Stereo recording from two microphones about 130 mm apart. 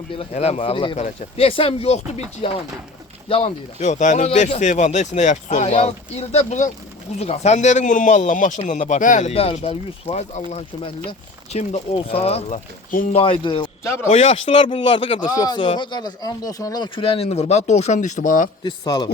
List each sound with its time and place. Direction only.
0.2 s speech: 55° left (ahead or behind)
0.9 s speech: 55° left (ahead or behind)
3.8 s speech: 70° left (ahead or behind)
9.3 s speech: 50° left (ahead or behind)
13.8 s speech: 20° left (ahead or behind)
14.1 s speech: 55° left (ahead or behind); by 15.3 s 40° left (ahead or behind)
15.4 s speech: 30° left (ahead or behind)
15.6 s speech: 40° left (ahead or behind); by 18.4 s 80° left
18.6 s speech: 35° left (ahead or behind)